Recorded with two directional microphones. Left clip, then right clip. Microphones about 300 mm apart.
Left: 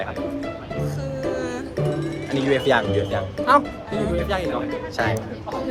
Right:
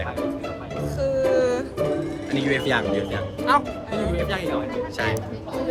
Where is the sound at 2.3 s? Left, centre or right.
Centre.